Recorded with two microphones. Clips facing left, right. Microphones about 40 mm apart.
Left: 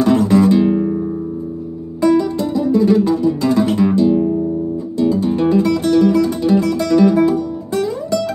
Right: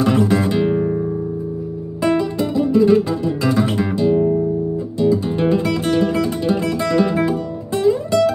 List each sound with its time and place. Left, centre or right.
0.0 s music: right
5.2 s music: right